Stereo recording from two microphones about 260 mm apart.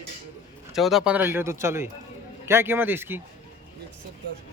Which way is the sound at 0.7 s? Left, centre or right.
Centre.